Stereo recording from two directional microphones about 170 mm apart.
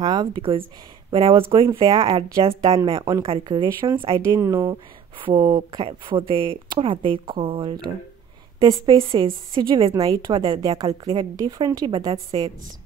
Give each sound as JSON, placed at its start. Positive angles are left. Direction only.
{"t": 0.0, "sound": "a woman's voice", "side_deg": -25}
{"t": 4.2, "sound": "a woman's voice", "side_deg": -15}
{"t": 5.2, "sound": "a woman's voice", "side_deg": -35}